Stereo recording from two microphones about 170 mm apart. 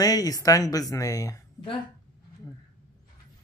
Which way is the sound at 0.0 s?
20° left (ahead or behind).